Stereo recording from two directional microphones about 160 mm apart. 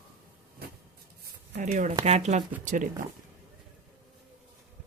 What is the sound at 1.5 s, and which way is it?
Speech, 50° right (ahead or behind).